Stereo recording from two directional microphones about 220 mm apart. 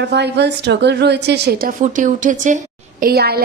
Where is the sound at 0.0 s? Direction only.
50° right (ahead or behind).